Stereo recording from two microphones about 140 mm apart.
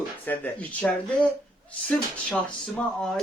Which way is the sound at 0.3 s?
10° left (ahead or behind).